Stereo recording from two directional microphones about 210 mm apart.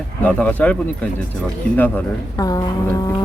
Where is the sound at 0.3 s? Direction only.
5° left (ahead or behind).